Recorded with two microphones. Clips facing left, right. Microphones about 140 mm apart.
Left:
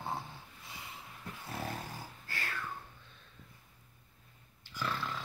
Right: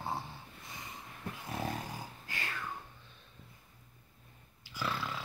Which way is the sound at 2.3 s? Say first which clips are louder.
Left 1 dB; 15° right (ahead or behind).